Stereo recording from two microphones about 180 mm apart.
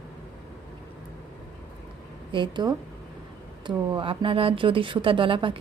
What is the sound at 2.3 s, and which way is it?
A woman's voice, 25° right (ahead or behind).